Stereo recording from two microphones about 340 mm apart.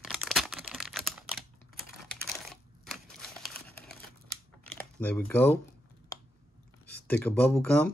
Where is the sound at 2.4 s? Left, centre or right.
Centre.